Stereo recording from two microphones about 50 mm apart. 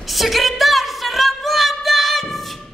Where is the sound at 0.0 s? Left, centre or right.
Centre.